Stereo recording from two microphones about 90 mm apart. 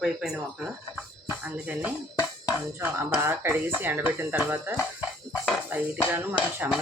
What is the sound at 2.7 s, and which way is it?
Speech, 25° right (ahead or behind).